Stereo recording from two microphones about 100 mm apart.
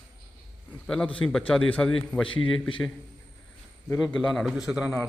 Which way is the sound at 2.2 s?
55° left (ahead or behind).